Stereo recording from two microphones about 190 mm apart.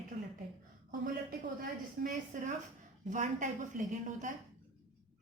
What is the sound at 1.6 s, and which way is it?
A woman's voice, 45° right (ahead or behind).